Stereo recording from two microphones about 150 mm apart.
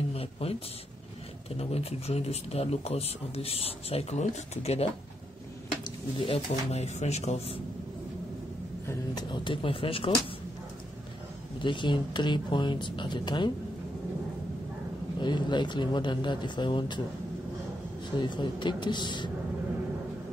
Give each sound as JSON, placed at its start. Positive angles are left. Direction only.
{"t": 0.1, "sound": "a sound", "side_deg": 40}
{"t": 1.6, "sound": "speech", "side_deg": 40}
{"t": 5.9, "sound": "speech", "side_deg": 35}
{"t": 8.8, "sound": "speech", "side_deg": 30}
{"t": 11.6, "sound": "speech", "side_deg": 30}
{"t": 15.1, "sound": "speech", "side_deg": 30}
{"t": 18.1, "sound": "speech", "side_deg": 30}